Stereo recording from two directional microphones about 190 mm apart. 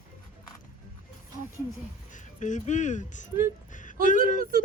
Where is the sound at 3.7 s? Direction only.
45° left (ahead or behind).